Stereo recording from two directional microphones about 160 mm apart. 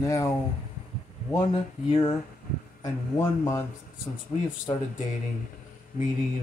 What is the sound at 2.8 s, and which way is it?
Speech, 20° left (ahead or behind).